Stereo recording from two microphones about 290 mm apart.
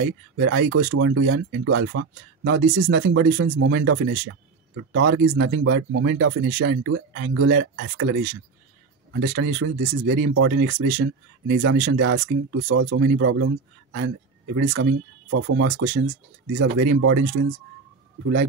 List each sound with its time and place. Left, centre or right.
0.4 s speech: right